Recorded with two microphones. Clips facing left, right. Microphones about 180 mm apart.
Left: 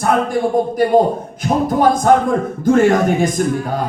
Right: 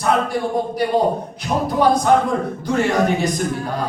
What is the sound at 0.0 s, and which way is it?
Speech, 50° left (ahead or behind).